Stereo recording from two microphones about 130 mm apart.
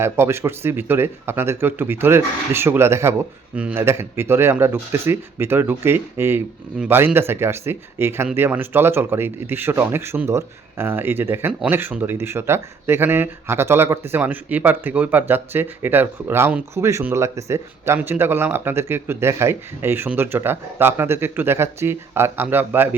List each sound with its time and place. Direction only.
0.0 s speech: 20° right (ahead or behind)
3.8 s speech: 20° right (ahead or behind)